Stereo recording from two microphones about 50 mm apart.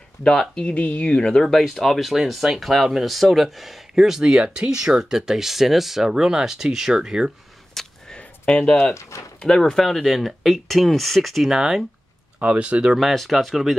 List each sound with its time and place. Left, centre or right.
0.2 s speech: centre
0.8 s speech: left
1.1 s speech: centre
7.8 s a sound: centre
8.2 s a sound: left
9.4 s speech: centre
11.5 s speech: centre
12.4 s speech: right
12.8 s speech: centre